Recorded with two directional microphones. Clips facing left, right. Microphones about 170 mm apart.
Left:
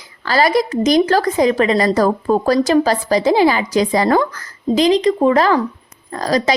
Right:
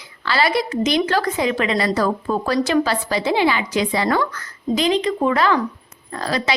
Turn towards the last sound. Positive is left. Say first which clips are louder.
# left 6 dB
turn(degrees=40)  # may be behind; listen again after turning